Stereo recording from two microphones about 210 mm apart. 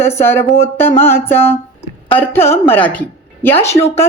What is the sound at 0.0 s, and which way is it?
A woman's voice, 10° left (ahead or behind).